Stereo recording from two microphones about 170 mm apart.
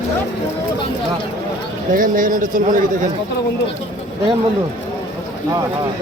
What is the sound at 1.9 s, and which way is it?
Speech, 55° right (ahead or behind).